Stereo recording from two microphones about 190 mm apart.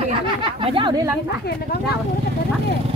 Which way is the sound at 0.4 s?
25° right (ahead or behind).